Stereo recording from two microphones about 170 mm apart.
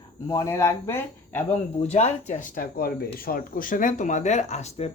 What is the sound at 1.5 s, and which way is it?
Speech, 40° left (ahead or behind).